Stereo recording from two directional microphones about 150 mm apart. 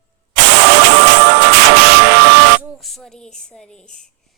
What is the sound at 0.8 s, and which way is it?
Music, 90° right.